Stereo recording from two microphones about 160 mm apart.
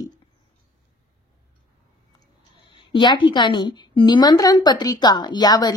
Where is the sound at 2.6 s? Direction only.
30° left (ahead or behind).